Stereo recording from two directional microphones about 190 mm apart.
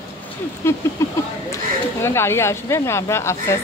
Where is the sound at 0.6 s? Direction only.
15° left (ahead or behind).